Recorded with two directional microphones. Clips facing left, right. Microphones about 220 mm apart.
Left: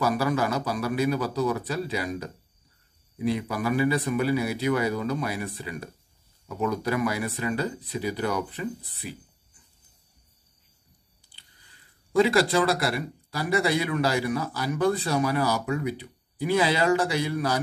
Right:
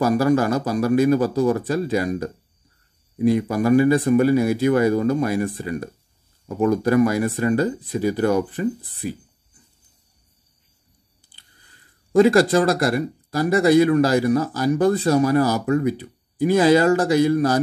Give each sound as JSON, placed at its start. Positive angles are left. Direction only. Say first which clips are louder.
{"t": 0.0, "sound": "speech", "louder": "right 7 dB", "side_deg": -45}
{"t": 12.1, "sound": "speech", "louder": "right 7 dB", "side_deg": -45}